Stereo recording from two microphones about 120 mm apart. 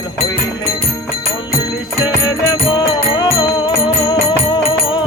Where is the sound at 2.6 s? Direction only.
50° left (ahead or behind).